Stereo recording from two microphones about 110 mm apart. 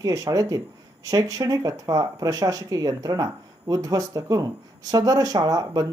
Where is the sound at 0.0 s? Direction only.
30° right (ahead or behind).